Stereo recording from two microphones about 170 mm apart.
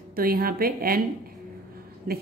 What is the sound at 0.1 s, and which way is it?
Speech, 60° right (ahead or behind).